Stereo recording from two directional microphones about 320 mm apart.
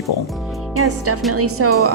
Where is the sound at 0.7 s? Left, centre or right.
Right.